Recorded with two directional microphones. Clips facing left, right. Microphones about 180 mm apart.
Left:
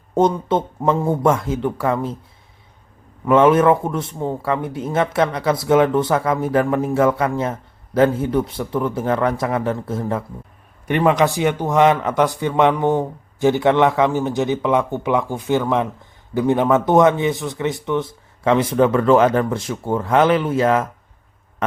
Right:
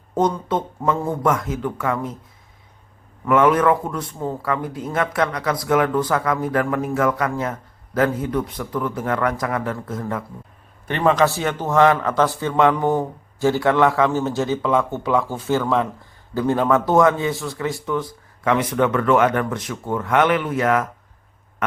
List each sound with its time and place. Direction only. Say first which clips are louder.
0.1 s speech: left 3 dB; 25° left (ahead or behind)
3.2 s speech: left 3 dB; 25° left (ahead or behind)
10.8 s a man's voice: left 1 dB; 15° left (ahead or behind)